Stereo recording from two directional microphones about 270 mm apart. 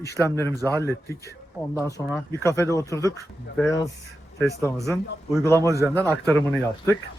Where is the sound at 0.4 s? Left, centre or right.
Centre.